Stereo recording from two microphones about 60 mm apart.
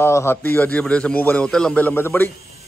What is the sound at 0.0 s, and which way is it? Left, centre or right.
Speech, left.